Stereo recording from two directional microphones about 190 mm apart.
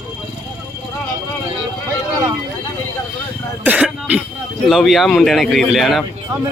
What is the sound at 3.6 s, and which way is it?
Throat clearing, 5° right (ahead or behind).